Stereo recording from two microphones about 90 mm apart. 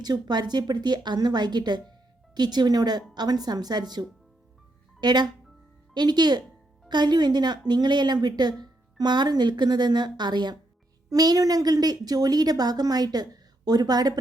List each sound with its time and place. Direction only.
0.0 s a woman's voice: 50° right (ahead or behind)